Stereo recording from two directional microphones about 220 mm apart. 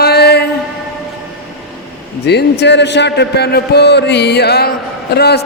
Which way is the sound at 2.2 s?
50° left (ahead or behind).